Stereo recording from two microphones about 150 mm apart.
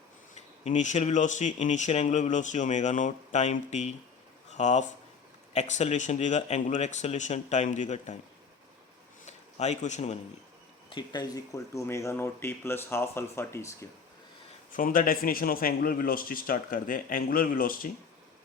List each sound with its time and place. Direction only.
0.6 s speech: 55° left (ahead or behind)
9.2 s a sound: 50° left (ahead or behind)
10.8 s speech: 30° left (ahead or behind)
14.7 s speech: 65° left (ahead or behind)